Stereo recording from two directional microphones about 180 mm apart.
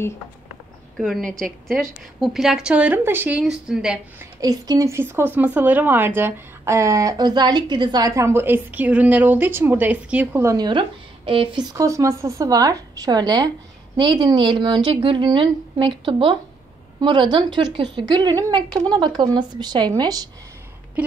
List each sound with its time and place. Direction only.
0.9 s speech: centre (ahead or behind)
4.4 s a woman's voice: 20° right (ahead or behind)